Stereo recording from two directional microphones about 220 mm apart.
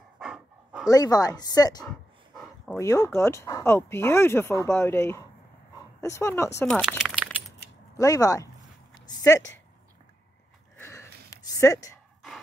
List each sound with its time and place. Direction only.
0.2 s dog: 5° right (ahead or behind)
0.8 s speech: 15° left (ahead or behind)
1.9 s dog: 5° left (ahead or behind)
2.8 s speech: 15° left (ahead or behind)
6.7 s a sound: centre (ahead or behind)
8.0 s speech: 15° left (ahead or behind)
10.8 s a sound: 10° left (ahead or behind)